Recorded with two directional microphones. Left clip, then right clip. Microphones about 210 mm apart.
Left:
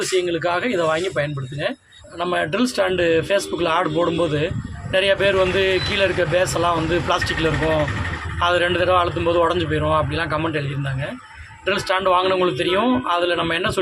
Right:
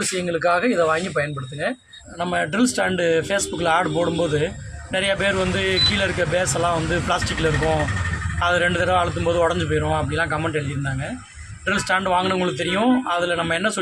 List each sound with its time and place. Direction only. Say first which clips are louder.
0.2 s speech: right 4 dB; 20° right (ahead or behind)
2.1 s speech: left 1 dB; centre (ahead or behind)
11.6 s speech: left 2 dB; 5° right (ahead or behind)